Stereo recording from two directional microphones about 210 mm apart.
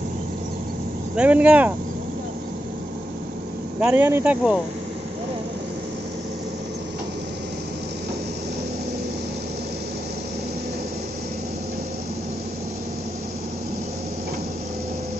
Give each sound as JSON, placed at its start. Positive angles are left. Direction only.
{"t": 1.1, "sound": "speech", "side_deg": -5}
{"t": 3.8, "sound": "speech", "side_deg": -10}